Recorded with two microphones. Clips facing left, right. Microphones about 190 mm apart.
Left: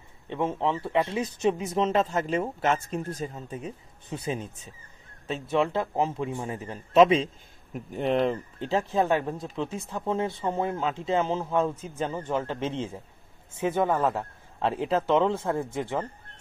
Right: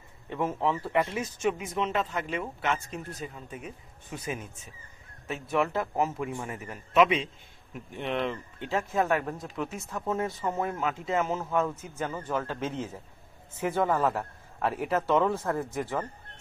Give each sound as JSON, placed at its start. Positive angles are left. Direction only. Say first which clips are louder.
{"t": 0.3, "sound": "speech", "louder": "left 1 dB", "side_deg": 25}
{"t": 3.6, "sound": "speech", "louder": "left 4 dB", "side_deg": 30}